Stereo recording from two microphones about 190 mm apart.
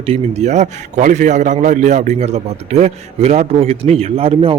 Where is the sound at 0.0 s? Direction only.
35° right (ahead or behind).